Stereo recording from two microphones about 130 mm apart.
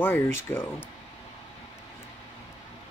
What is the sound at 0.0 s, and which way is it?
Speech, 15° left (ahead or behind).